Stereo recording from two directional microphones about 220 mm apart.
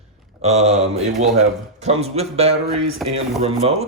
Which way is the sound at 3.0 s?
Centre (ahead or behind).